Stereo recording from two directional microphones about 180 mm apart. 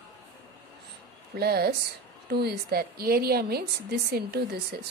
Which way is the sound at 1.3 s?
60° right (ahead or behind).